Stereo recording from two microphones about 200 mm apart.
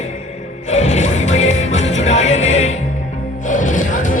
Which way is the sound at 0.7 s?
35° left (ahead or behind).